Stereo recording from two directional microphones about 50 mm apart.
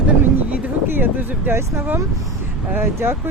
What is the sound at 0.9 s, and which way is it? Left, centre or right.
Speech, right.